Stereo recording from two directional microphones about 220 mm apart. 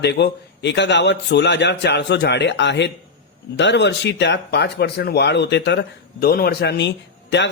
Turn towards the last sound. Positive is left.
turn(degrees=55)  # may be behind; listen again after turning